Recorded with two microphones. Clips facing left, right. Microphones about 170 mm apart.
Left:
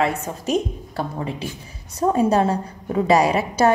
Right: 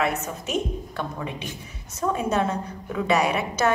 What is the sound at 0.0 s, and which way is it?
Speech, 30° left (ahead or behind).